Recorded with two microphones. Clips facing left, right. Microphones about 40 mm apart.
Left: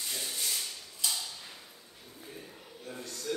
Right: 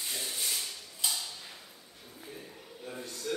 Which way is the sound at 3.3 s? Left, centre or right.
Centre.